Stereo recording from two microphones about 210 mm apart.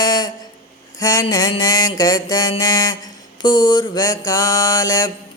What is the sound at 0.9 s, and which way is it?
Mantra, 15° left (ahead or behind).